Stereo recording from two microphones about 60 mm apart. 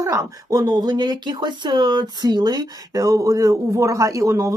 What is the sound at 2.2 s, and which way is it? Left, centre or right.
Speech, right.